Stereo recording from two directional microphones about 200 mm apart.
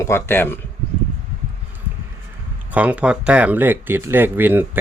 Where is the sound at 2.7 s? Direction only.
5° right (ahead or behind).